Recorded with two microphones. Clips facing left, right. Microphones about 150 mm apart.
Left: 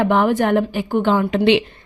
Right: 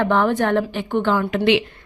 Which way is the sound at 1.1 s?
25° left (ahead or behind).